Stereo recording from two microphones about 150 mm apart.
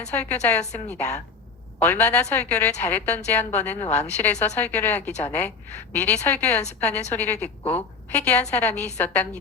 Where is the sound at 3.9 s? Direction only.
50° left (ahead or behind).